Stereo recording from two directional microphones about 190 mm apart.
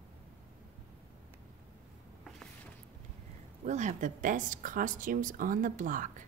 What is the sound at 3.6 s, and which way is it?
A woman's voice, 40° right (ahead or behind).